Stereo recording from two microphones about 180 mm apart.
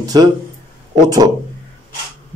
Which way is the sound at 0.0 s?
20° right (ahead or behind).